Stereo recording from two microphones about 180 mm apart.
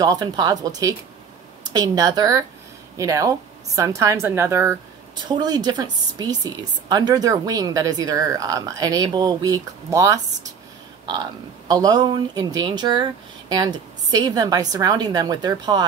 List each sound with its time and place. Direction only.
0.0 s speech: 20° right (ahead or behind)